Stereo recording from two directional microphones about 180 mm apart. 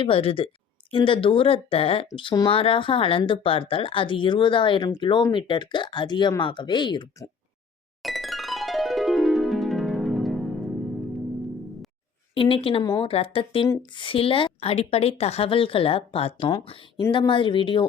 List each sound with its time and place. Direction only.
0.0 s a woman's voice: 30° left (ahead or behind)
8.0 s music: centre (ahead or behind)
12.3 s speech: 30° left (ahead or behind)
12.8 s speech: 20° left (ahead or behind)
13.1 s a woman's voice: 30° left (ahead or behind)